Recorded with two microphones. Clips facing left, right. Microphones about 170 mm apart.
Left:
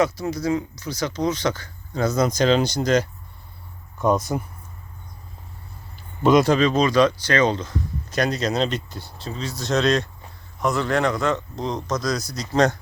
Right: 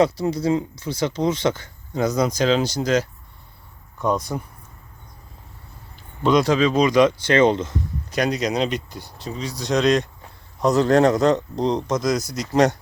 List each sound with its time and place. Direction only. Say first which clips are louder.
0.0 s speech: right 3 dB; 30° right (ahead or behind); by 4.4 s centre (ahead or behind)
6.2 s speech: left 1 dB; centre (ahead or behind); by 10.1 s 15° right (ahead or behind)
10.6 s speech: right 6 dB; 40° right (ahead or behind); by 12.7 s 15° right (ahead or behind)